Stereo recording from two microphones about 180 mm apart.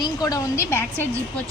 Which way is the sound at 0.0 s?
20° left (ahead or behind).